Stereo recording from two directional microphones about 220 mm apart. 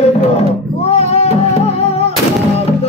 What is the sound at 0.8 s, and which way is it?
Music, 30° left (ahead or behind).